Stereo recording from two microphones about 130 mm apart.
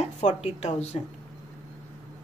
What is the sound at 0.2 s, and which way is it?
Speech, 55° left (ahead or behind).